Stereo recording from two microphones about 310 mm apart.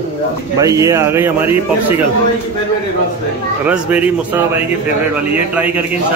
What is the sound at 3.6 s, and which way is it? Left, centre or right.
Speech, centre.